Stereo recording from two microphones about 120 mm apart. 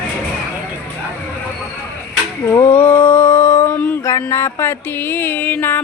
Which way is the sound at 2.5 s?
20° left (ahead or behind).